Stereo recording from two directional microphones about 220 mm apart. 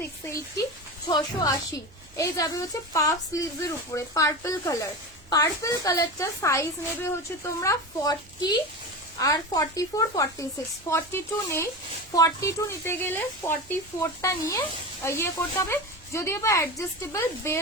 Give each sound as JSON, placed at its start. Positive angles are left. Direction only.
{"t": 0.3, "sound": "a woman's voice", "side_deg": 15}